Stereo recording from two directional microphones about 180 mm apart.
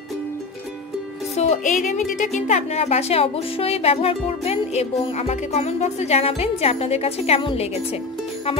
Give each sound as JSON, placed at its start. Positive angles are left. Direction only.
{"t": 1.3, "sound": "speech", "side_deg": 40}